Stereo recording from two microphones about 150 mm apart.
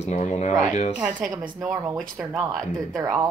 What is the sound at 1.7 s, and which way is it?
Speech, 20° right (ahead or behind).